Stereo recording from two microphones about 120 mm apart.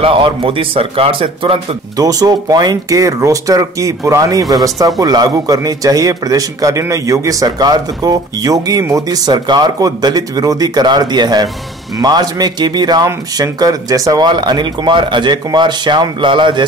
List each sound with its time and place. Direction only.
0.0 s a man's voice: 50° right (ahead or behind)
2.0 s a man's voice: 30° right (ahead or behind)